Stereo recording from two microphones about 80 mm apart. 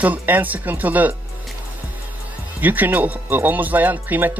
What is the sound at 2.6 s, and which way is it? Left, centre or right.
Speech, right.